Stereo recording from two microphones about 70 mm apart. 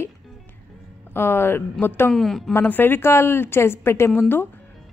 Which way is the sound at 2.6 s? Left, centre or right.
Left.